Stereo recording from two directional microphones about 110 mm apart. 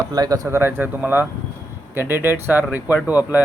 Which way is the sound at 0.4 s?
20° right (ahead or behind).